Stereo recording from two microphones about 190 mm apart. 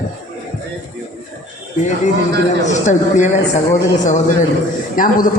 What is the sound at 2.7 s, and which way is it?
A man's voice, 40° left (ahead or behind).